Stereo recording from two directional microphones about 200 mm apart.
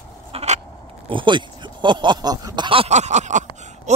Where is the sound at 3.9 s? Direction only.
35° right (ahead or behind).